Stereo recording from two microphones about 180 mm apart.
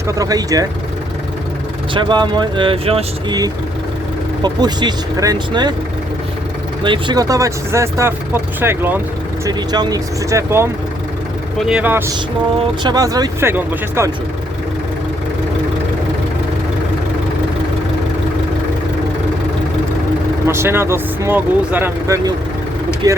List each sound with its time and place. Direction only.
0.1 s speech: 20° right (ahead or behind)
1.9 s speech: 25° right (ahead or behind)
4.4 s speech: 25° right (ahead or behind)
6.8 s speech: 25° right (ahead or behind)
12.5 s speech: 25° right (ahead or behind)
20.5 s speech: 15° right (ahead or behind)